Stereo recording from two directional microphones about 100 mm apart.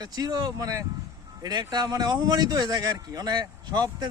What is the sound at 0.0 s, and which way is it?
A man's voice, 40° right (ahead or behind).